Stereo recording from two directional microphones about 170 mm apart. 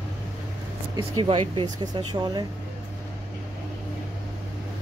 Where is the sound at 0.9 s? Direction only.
30° right (ahead or behind).